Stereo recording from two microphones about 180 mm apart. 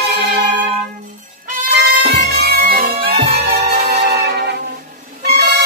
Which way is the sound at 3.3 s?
60° right (ahead or behind).